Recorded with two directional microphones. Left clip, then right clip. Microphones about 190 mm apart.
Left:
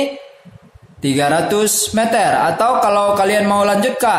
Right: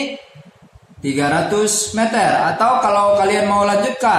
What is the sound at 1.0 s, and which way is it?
Speech, 50° left (ahead or behind).